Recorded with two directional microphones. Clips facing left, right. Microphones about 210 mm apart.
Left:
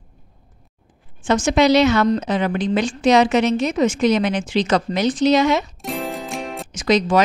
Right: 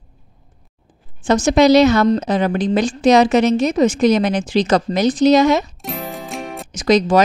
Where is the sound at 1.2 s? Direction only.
40° right (ahead or behind).